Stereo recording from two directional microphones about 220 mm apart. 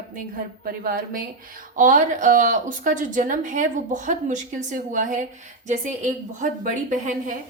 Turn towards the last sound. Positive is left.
turn(degrees=-35)  # may be behind; listen again after turning